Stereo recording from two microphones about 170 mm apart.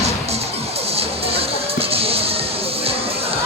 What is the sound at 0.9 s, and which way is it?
Music, 35° right (ahead or behind).